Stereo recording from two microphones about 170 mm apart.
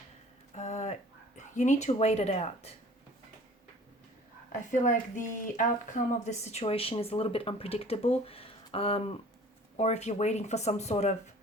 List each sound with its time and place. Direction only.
0.5 s a sound: 40° left (ahead or behind)
1.4 s speech: 45° left (ahead or behind)
4.7 s speech: 45° left (ahead or behind)